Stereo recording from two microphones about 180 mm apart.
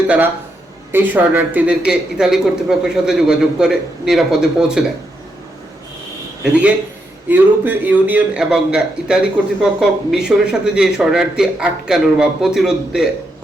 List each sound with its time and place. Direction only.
0.9 s a man's voice: 10° right (ahead or behind)
6.4 s a man's voice: 10° right (ahead or behind)